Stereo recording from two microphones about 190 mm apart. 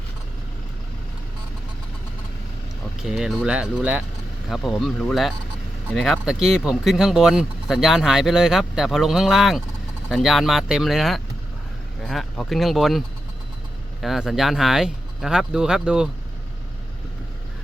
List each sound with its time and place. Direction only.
3.1 s speech: centre (ahead or behind)
14.0 s speech: centre (ahead or behind)